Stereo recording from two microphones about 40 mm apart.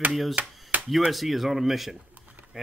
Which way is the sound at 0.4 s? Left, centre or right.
Right.